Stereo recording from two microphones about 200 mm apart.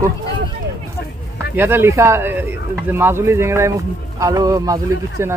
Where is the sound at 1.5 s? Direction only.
10° right (ahead or behind).